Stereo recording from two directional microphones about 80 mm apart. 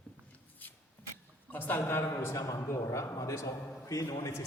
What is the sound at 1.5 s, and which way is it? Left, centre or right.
A man's voice, left.